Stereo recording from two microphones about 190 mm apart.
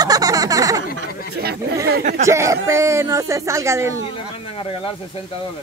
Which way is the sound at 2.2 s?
15° right (ahead or behind).